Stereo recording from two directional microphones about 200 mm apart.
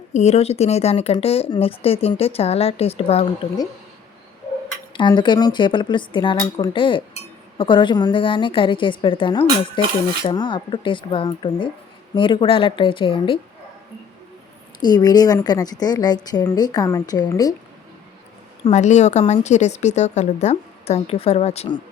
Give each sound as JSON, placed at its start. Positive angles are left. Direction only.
{"t": 0.1, "sound": "speech", "side_deg": 35}
{"t": 4.9, "sound": "speech", "side_deg": 25}
{"t": 14.8, "sound": "speech", "side_deg": 20}
{"t": 18.6, "sound": "a woman's voice", "side_deg": 35}